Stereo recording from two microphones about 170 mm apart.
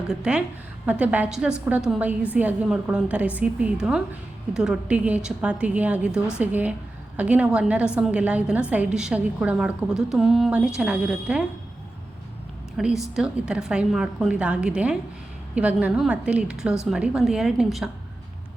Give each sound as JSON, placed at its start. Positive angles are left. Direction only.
{"t": 0.1, "sound": "a woman's voice", "side_deg": -5}
{"t": 12.7, "sound": "a woman's voice", "side_deg": 0}